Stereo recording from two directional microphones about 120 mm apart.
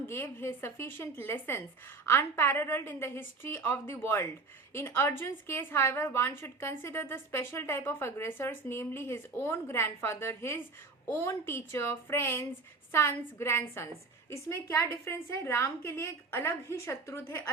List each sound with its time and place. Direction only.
0.1 s a woman's voice: 20° left (ahead or behind)